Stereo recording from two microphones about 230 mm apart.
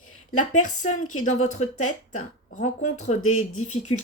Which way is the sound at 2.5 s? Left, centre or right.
Left.